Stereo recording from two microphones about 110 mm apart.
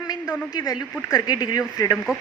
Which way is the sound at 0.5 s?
35° left (ahead or behind).